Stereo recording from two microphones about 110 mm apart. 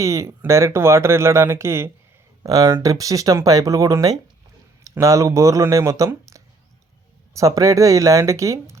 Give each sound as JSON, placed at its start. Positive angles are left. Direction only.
{"t": 0.0, "sound": "speech", "side_deg": -25}